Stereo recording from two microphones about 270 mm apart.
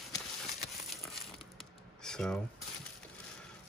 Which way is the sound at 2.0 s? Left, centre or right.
Centre.